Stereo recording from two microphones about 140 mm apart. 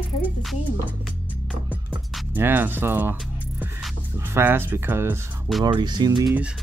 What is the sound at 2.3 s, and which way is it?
Speech, 15° right (ahead or behind).